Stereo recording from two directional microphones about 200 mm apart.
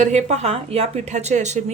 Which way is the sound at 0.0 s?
35° right (ahead or behind).